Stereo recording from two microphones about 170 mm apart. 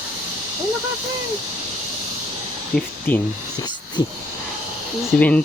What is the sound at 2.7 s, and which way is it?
Speech, 5° left (ahead or behind).